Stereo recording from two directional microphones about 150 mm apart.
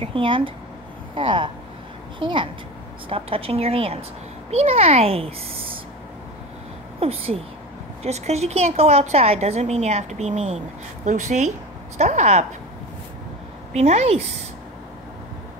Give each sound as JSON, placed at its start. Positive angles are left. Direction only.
{"t": 0.0, "sound": "a child's voice", "side_deg": -35}
{"t": 7.0, "sound": "a child's voice", "side_deg": -40}
{"t": 13.7, "sound": "a woman's voice", "side_deg": -45}